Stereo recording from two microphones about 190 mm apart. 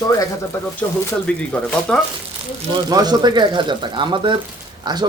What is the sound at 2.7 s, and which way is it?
Speech, 20° right (ahead or behind).